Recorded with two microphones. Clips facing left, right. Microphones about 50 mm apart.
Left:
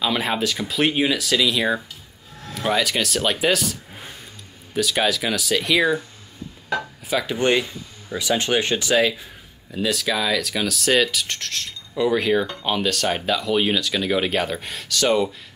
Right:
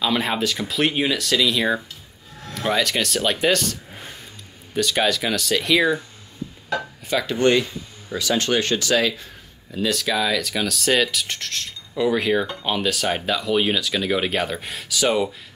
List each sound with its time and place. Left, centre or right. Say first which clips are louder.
0.0 s speech: even; centre
7.3 s speech: right 3 dB; centre
9.7 s speech: even; centre